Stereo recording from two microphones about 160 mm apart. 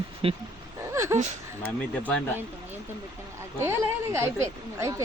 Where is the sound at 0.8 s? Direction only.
15° right (ahead or behind).